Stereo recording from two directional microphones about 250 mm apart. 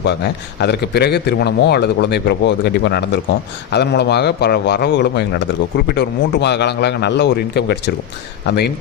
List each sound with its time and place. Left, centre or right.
0.6 s a man's voice: left